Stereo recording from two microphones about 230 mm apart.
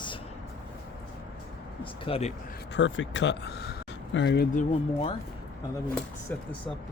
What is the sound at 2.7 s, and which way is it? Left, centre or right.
Speech, left.